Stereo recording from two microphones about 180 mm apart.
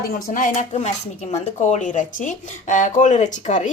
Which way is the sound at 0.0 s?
50° left (ahead or behind).